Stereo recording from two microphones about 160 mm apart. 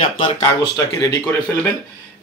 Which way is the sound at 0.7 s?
20° left (ahead or behind).